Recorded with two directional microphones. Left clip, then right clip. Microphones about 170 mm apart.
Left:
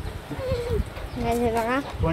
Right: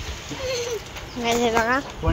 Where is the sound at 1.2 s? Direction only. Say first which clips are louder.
Right 4 dB; 5° left (ahead or behind).